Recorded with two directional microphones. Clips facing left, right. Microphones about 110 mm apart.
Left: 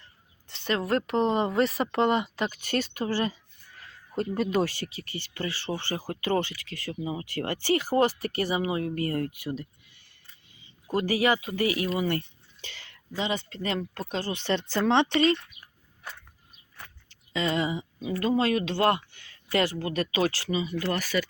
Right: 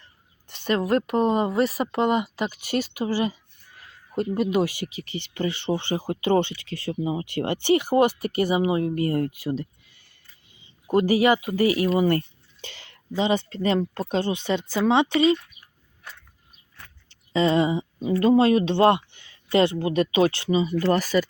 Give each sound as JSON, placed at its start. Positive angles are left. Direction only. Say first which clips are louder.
{"t": 0.4, "sound": "speech", "louder": "right 5 dB", "side_deg": -15}
{"t": 11.9, "sound": "speech", "louder": "right 7 dB", "side_deg": -40}
{"t": 12.6, "sound": "speech", "louder": "right 5 dB", "side_deg": -30}
{"t": 14.3, "sound": "speech", "louder": "right 2 dB", "side_deg": -10}
{"t": 17.1, "sound": "speech", "louder": "right 7 dB", "side_deg": -30}